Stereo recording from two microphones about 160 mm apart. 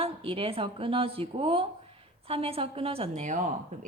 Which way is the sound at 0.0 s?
35° right (ahead or behind).